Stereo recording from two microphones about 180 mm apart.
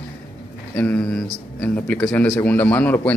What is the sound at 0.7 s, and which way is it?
A man's voice, 10° left (ahead or behind).